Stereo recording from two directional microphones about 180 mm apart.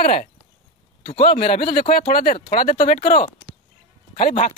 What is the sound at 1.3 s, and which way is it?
Speech, 40° left (ahead or behind).